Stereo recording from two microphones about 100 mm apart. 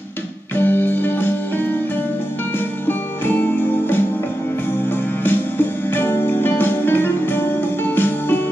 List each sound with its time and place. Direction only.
0.6 s music: 20° left (ahead or behind)
2.9 s music: 20° left (ahead or behind)
5.2 s music: 20° left (ahead or behind)